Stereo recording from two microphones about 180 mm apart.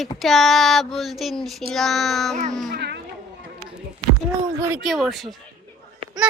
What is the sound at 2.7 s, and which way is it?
Speech, 70° right (ahead or behind).